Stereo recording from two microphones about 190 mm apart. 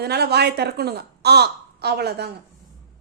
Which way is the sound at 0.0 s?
60° right (ahead or behind).